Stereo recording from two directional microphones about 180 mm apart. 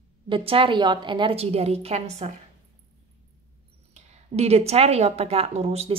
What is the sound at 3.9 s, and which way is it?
A woman's voice, 35° right (ahead or behind).